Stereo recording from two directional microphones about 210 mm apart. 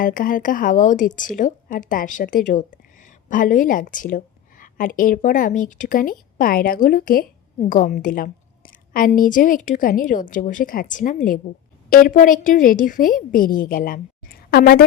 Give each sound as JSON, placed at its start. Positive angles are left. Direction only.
{"t": 0.0, "sound": "a woman's voice", "side_deg": 40}